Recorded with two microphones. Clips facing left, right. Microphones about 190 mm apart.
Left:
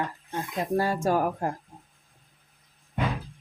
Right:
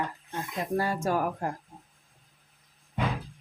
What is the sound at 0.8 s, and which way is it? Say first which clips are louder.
Speech: left 3 dB; 30° left (ahead or behind).